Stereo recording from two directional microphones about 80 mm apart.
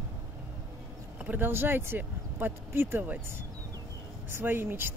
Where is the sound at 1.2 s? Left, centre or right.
Right.